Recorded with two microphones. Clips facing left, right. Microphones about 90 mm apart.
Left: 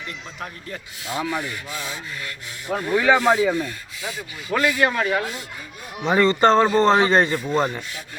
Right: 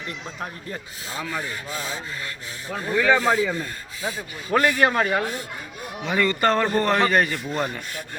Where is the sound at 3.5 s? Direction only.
35° right (ahead or behind).